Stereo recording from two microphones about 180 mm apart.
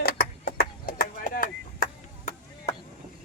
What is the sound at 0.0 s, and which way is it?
Chop, 60° left (ahead or behind).